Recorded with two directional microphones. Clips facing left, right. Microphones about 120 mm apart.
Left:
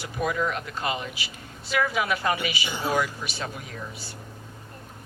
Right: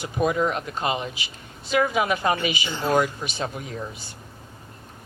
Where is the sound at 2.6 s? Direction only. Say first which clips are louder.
Right 2 dB; 15° left (ahead or behind).